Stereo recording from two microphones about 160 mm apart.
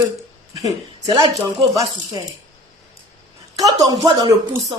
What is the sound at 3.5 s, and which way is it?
A woman's voice, 25° right (ahead or behind).